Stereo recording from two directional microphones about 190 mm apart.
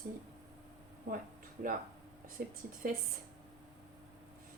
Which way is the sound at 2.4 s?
50° right (ahead or behind).